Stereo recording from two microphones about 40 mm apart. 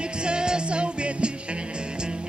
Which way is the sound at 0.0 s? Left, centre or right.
Right.